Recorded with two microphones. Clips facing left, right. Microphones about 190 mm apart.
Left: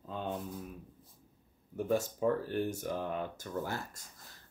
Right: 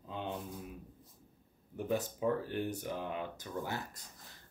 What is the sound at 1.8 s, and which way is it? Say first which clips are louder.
Speech: left 3 dB; 45° left (ahead or behind).